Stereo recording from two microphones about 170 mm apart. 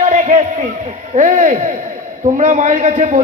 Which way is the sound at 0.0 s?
45° right (ahead or behind).